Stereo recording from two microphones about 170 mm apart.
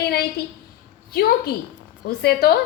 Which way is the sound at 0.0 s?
70° left (ahead or behind).